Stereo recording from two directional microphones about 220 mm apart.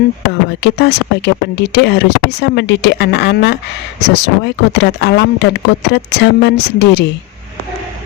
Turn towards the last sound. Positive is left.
turn(degrees=50)  # may be behind; listen again after turning